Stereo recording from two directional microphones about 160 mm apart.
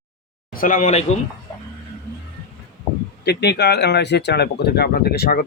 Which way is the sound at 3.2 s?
90° left.